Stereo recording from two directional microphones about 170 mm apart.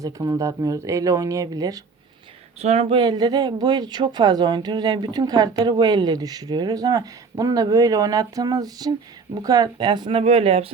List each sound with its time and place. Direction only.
0.0 s speech: 20° right (ahead or behind)
2.6 s speech: 35° right (ahead or behind)